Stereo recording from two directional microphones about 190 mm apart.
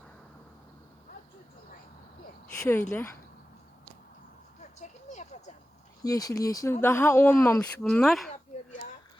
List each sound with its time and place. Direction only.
2.6 s speech: 10° left (ahead or behind)
4.8 s a sound: 40° left (ahead or behind)
6.0 s speech: 20° left (ahead or behind); by 8.3 s centre (ahead or behind)